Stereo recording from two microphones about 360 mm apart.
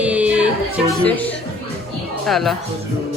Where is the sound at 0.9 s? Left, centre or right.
Centre.